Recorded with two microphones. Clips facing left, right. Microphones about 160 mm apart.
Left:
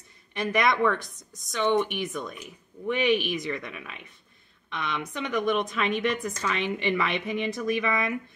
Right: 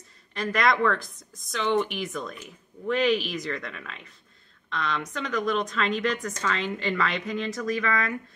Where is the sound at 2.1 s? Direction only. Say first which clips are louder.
Even; 5° left (ahead or behind).